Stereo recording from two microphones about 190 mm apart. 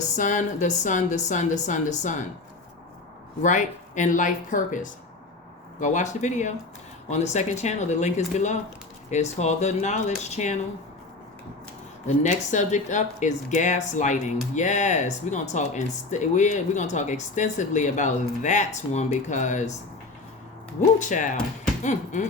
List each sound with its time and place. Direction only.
0.2 s speech: 40° left (ahead or behind)
3.4 s speech: 40° left (ahead or behind)
12.0 s speech: 40° left (ahead or behind)
21.0 s speech: 40° left (ahead or behind)